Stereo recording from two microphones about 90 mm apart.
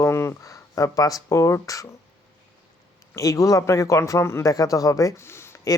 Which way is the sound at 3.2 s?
40° left (ahead or behind).